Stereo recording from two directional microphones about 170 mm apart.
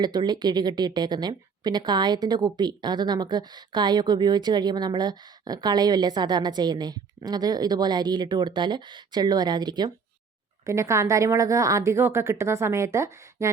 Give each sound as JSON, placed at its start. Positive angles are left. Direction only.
{"t": 0.0, "sound": "a woman's voice", "side_deg": -25}